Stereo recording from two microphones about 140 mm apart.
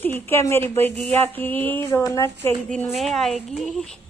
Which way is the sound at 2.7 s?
5° left (ahead or behind).